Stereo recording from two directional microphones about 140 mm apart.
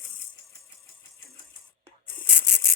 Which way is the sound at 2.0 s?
15° left (ahead or behind).